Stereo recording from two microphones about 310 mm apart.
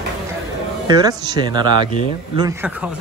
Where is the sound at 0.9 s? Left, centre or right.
Centre.